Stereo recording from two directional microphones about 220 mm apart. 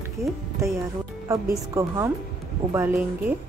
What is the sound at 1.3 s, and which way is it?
A woman's voice, 15° right (ahead or behind).